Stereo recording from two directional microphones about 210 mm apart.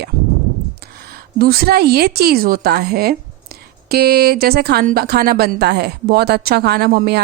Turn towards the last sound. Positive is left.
turn(degrees=-45)  # may be behind; listen again after turning